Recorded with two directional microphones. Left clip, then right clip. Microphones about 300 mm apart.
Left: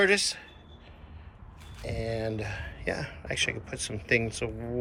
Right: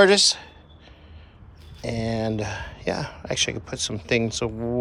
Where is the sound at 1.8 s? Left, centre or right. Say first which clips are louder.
Right 6 dB; centre.